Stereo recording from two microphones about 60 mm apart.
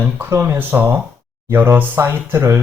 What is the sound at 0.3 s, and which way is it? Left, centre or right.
Speech, right.